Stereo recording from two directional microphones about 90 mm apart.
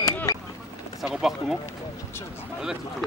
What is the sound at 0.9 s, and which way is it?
Speech, 5° right (ahead or behind).